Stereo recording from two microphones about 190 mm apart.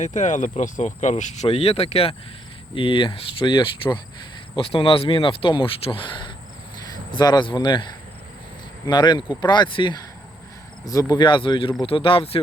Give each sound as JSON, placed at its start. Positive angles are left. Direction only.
{"t": 0.0, "sound": "speech", "side_deg": 40}
{"t": 8.9, "sound": "speech", "side_deg": 25}